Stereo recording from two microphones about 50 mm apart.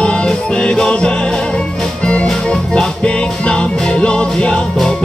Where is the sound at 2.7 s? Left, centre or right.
Centre.